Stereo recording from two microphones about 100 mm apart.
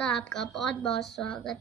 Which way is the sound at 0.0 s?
5° left (ahead or behind).